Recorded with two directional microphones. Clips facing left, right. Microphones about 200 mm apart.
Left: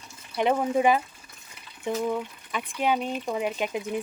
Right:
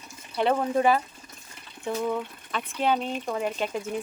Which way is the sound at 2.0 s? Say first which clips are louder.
Even; 10° left (ahead or behind).